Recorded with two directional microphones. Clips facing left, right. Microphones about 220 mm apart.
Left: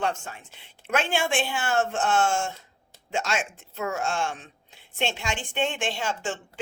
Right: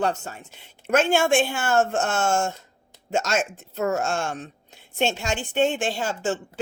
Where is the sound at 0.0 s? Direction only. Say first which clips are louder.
Right 4 dB; 40° right (ahead or behind).